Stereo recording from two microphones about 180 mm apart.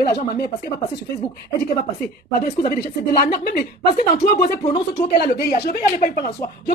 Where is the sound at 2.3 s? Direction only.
55° left (ahead or behind).